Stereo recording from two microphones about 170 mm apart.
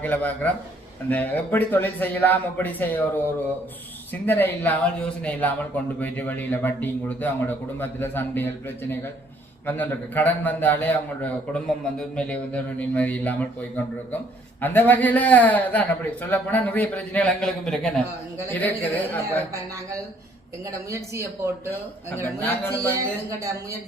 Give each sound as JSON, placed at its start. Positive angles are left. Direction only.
{"t": 0.0, "sound": "speech", "side_deg": 10}
{"t": 4.1, "sound": "speech", "side_deg": 10}
{"t": 20.9, "sound": "speech", "side_deg": -15}
{"t": 22.4, "sound": "speech", "side_deg": 10}